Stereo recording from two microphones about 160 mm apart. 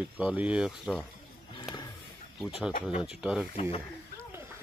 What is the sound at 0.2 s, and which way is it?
Speech, 5° right (ahead or behind).